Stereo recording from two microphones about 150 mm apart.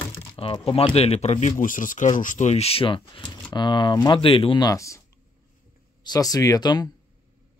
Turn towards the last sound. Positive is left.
turn(degrees=25)  # may be behind; listen again after turning